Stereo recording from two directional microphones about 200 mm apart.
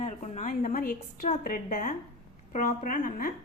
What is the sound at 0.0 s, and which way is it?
A woman's voice, 35° left (ahead or behind).